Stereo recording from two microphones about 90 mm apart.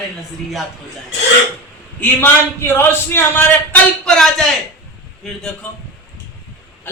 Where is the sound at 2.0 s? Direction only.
25° left (ahead or behind).